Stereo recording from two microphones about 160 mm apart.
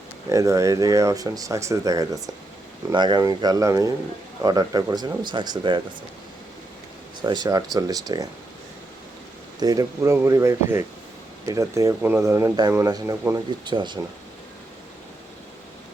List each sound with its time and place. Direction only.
0.3 s speech: 20° right (ahead or behind)
7.2 s speech: 30° right (ahead or behind)
9.6 s speech: 20° right (ahead or behind)